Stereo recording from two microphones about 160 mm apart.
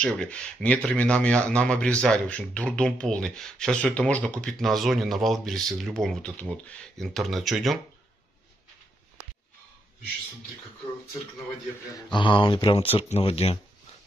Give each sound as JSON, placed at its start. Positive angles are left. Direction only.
{"t": 0.0, "sound": "speech", "side_deg": 5}
{"t": 12.1, "sound": "speech", "side_deg": 30}